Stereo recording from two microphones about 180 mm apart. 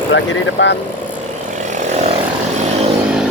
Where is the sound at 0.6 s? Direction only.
90° left.